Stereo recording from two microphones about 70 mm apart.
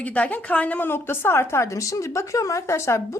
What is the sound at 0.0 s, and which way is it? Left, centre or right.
Speech, left.